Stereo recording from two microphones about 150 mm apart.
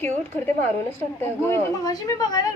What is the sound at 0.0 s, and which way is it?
A woman's voice, 15° left (ahead or behind).